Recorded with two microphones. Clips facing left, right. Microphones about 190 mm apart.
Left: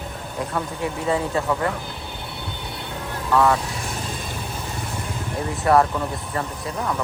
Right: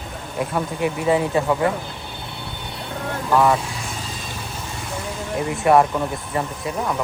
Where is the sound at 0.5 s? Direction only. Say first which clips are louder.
Right 4 dB; 20° right (ahead or behind).